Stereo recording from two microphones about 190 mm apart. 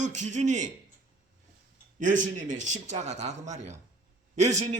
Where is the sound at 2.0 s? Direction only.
40° right (ahead or behind).